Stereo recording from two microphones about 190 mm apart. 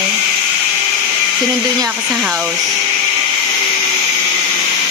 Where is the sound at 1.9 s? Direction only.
10° right (ahead or behind).